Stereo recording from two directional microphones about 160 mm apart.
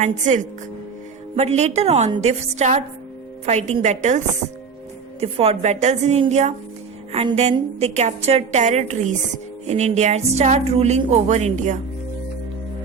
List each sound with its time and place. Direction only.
0.0 s speech: 50° right (ahead or behind)
5.2 s speech: 40° right (ahead or behind)